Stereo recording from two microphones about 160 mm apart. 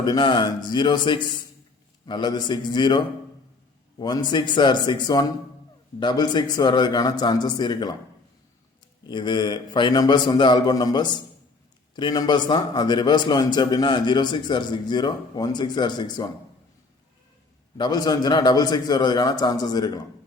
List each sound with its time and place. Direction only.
0.0 s a man's voice: 30° left (ahead or behind)
9.0 s a man's voice: 30° left (ahead or behind)
17.7 s a man's voice: 25° left (ahead or behind)